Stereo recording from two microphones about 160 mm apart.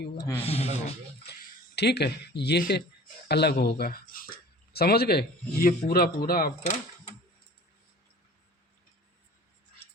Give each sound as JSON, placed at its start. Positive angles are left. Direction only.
{"t": 0.2, "sound": "speech", "side_deg": 15}
{"t": 0.4, "sound": "speech", "side_deg": 40}
{"t": 1.3, "sound": "speech", "side_deg": 90}
{"t": 4.7, "sound": "speech", "side_deg": 80}